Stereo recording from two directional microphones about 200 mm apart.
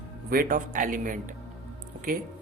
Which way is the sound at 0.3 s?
45° right (ahead or behind).